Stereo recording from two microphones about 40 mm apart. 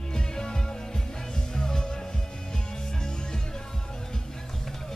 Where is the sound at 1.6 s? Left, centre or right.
Centre.